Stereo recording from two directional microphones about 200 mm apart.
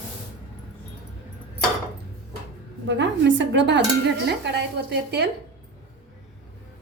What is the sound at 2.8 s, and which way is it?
Dishes, 65° right (ahead or behind).